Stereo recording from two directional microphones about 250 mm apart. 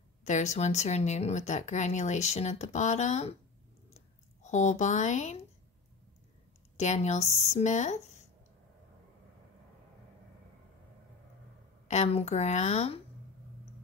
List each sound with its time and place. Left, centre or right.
0.2 s speech: left
4.4 s speech: left
6.8 s speech: left
11.9 s speech: left